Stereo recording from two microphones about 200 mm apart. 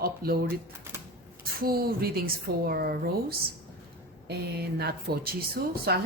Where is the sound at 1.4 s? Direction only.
50° right (ahead or behind).